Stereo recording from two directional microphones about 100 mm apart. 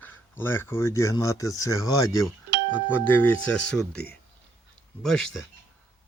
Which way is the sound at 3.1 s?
15° left (ahead or behind).